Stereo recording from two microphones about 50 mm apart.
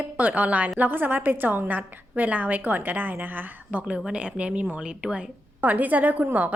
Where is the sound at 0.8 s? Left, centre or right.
Right.